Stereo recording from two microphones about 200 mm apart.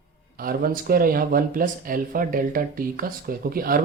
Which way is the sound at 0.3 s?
45° right (ahead or behind).